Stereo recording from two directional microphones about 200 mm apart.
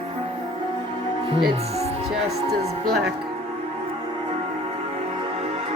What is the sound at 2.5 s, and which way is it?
Speech, 50° right (ahead or behind).